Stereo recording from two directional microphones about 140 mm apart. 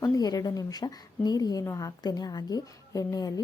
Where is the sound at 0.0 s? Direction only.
25° left (ahead or behind).